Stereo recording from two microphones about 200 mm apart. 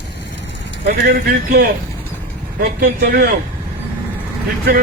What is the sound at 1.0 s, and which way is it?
Speech, 45° right (ahead or behind).